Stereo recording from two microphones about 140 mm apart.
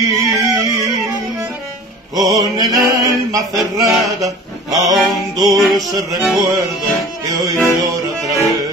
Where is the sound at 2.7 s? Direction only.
25° right (ahead or behind).